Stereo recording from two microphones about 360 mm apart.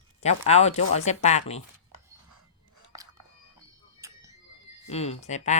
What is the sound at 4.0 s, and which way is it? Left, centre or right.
Music, centre.